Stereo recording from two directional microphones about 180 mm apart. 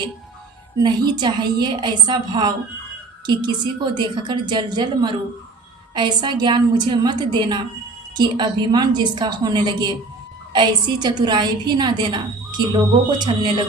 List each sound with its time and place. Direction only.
0.8 s a woman's voice: 25° right (ahead or behind)
3.9 s a woman's voice: 25° right (ahead or behind)